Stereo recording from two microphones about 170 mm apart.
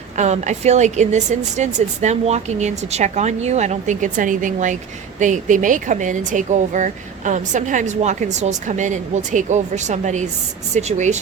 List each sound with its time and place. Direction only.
0.2 s speech: 45° right (ahead or behind)